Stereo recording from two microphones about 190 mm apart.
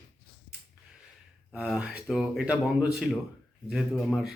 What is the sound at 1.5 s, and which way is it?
Speech, 5° right (ahead or behind).